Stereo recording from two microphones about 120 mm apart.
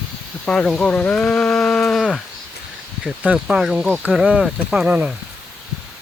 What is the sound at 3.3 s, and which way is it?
Speech, 5° right (ahead or behind).